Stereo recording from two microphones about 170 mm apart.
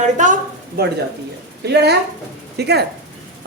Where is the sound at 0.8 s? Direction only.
65° right (ahead or behind).